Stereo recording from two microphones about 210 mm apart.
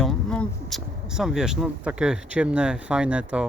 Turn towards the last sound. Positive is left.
turn(degrees=-5)  # may be behind; listen again after turning